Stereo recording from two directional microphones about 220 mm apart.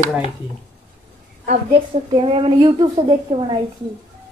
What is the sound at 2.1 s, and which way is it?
A woman's voice, 25° right (ahead or behind).